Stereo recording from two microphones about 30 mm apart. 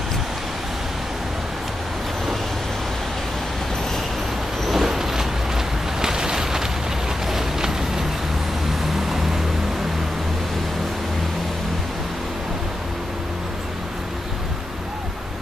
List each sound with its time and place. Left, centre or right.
4.6 s vehicle: centre
5.9 s a sound: right
7.2 s vehicle: centre
8.8 s music: centre